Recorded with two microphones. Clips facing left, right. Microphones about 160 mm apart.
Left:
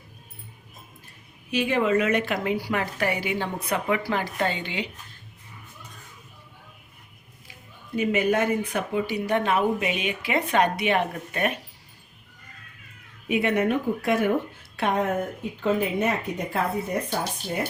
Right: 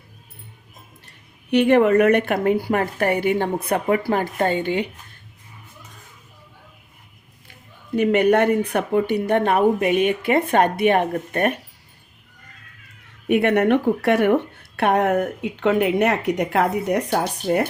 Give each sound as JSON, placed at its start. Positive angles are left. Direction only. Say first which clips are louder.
{"t": 1.0, "sound": "a woman's voice", "louder": "even", "side_deg": -65}
{"t": 7.9, "sound": "a woman's voice", "louder": "right 6 dB", "side_deg": -65}
{"t": 13.2, "sound": "speech", "louder": "right 6 dB", "side_deg": -65}